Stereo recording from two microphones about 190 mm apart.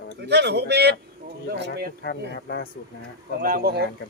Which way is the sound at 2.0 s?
60° left (ahead or behind).